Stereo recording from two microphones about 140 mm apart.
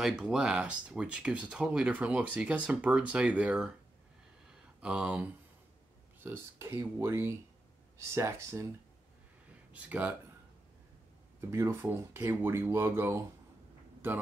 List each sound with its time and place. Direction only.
0.0 s speech: 5° right (ahead or behind)
4.7 s speech: 10° right (ahead or behind)
9.7 s speech: 10° right (ahead or behind)
11.5 s speech: 20° right (ahead or behind)